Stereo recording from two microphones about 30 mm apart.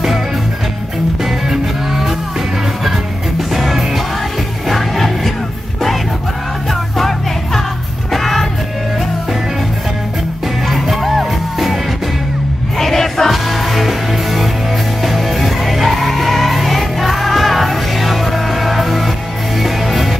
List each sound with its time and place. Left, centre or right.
1.5 s music: centre
3.3 s music: centre
6.7 s music: centre
10.7 s music: centre
12.7 s music: centre